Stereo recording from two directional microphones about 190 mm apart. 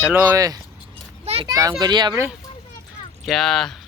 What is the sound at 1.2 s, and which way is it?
Children playing, 35° right (ahead or behind).